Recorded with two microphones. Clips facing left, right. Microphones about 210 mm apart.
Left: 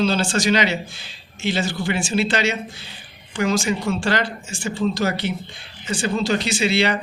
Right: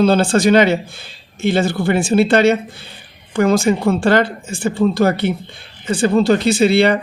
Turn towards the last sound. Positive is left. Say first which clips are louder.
# right 8 dB
turn(degrees=-55)  # may be behind; listen again after turning